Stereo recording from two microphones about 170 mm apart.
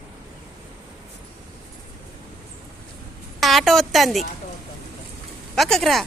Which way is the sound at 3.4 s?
Centre (ahead or behind).